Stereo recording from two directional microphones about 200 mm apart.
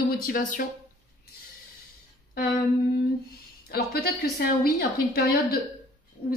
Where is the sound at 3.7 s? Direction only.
50° left (ahead or behind).